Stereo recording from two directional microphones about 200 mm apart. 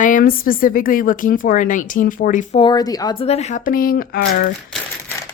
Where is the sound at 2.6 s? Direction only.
20° left (ahead or behind); by 4.2 s 45° left (ahead or behind).